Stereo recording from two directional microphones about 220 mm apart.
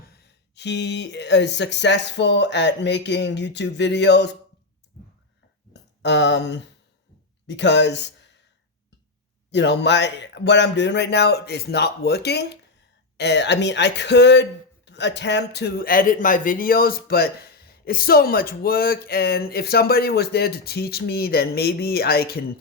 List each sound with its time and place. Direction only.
0.2 s speech: 50° left (ahead or behind)
6.0 s speech: 50° left (ahead or behind)
9.5 s speech: 50° left (ahead or behind)